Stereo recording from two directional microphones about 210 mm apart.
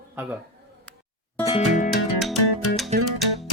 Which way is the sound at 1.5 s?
35° left (ahead or behind).